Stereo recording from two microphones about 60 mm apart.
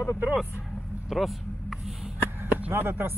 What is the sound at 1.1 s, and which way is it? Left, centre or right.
Speech, centre.